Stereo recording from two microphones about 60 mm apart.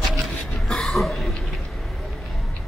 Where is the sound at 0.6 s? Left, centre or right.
Centre.